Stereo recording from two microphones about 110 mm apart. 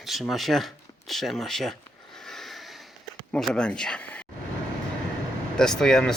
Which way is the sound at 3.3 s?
5° left (ahead or behind).